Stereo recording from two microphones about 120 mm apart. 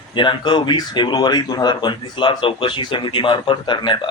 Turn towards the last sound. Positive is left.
turn(degrees=40)  # may be behind; listen again after turning